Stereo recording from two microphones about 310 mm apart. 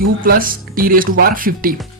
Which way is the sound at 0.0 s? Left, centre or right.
Right.